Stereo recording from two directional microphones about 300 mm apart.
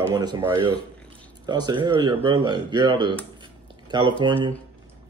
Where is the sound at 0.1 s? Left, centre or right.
Centre.